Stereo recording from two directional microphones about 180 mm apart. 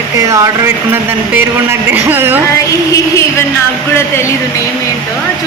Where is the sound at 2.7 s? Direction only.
20° left (ahead or behind).